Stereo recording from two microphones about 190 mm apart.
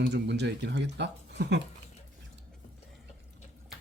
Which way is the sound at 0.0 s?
60° right (ahead or behind).